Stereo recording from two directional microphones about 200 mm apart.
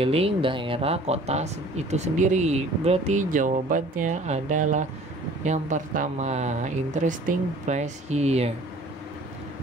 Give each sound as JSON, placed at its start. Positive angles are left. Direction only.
{"t": 0.0, "sound": "speech", "side_deg": -30}